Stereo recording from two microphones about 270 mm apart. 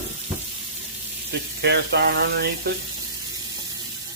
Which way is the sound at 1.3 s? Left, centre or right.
Right.